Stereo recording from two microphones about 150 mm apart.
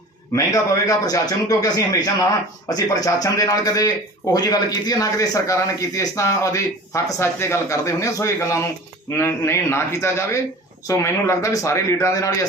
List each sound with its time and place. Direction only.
0.3 s a man's voice: 20° left (ahead or behind)